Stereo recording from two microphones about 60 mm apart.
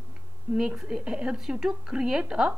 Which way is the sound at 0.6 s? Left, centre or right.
Centre.